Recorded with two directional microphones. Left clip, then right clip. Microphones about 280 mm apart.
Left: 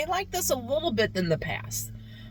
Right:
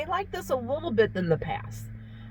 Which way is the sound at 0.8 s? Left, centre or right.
Left.